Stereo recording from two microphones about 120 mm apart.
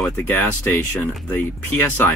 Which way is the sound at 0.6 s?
25° left (ahead or behind).